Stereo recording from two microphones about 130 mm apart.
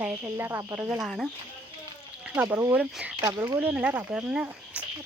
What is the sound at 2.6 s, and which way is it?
Speech, 20° right (ahead or behind).